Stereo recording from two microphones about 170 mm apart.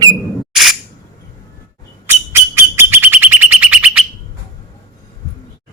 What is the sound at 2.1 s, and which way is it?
Bird, 15° right (ahead or behind).